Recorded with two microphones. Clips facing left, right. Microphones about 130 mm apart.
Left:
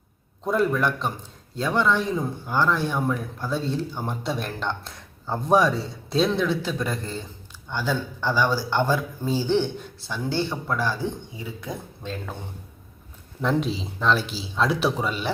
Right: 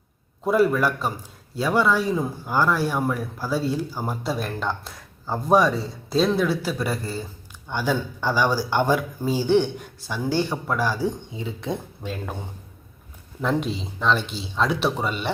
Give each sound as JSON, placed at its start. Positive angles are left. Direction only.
{"t": 0.4, "sound": "a man's voice", "side_deg": -5}
{"t": 11.3, "sound": "speech", "side_deg": -25}
{"t": 12.0, "sound": "speech", "side_deg": -15}
{"t": 13.4, "sound": "a man's voice", "side_deg": 0}